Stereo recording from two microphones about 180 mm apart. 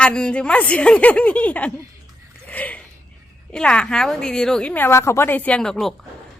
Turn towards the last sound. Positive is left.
turn(degrees=5)  # may be behind; listen again after turning